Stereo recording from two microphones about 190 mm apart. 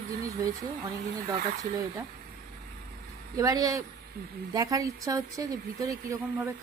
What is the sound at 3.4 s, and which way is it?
A woman's voice, 20° right (ahead or behind).